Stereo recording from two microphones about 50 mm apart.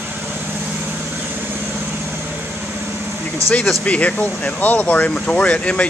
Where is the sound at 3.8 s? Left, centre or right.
Left.